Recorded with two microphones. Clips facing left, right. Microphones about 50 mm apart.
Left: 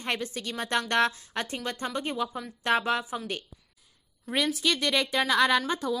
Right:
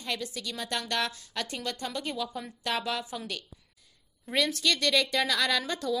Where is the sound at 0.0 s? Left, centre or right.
Left.